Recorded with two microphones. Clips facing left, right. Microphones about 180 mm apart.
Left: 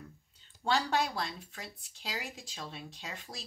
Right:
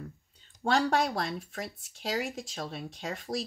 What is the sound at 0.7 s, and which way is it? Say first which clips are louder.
Speech: right 4 dB; 50° right (ahead or behind).